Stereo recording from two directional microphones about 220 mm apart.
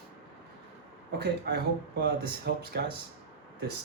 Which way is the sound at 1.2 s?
45° right (ahead or behind).